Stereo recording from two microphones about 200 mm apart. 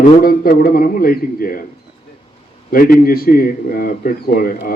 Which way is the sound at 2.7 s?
45° left (ahead or behind).